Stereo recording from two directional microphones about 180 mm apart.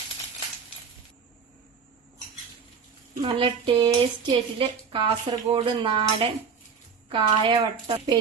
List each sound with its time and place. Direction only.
3.2 s speech: 30° right (ahead or behind)